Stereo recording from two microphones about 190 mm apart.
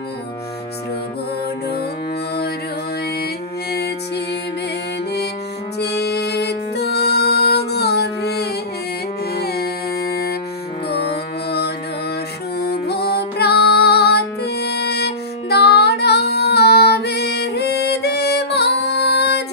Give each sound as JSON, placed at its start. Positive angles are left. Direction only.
{"t": 5.8, "sound": "music", "side_deg": 60}